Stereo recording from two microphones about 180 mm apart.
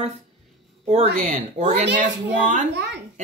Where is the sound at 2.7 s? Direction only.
75° right (ahead or behind).